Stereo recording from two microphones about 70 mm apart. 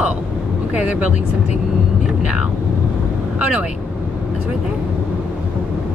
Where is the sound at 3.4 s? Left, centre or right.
Centre.